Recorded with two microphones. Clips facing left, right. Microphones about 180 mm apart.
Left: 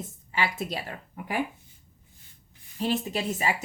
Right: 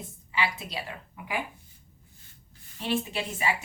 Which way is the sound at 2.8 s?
40° left (ahead or behind).